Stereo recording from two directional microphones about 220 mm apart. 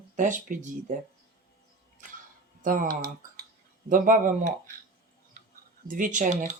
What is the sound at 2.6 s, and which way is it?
Speech, 35° right (ahead or behind).